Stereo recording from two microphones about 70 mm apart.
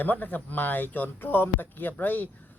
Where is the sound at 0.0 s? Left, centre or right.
Left.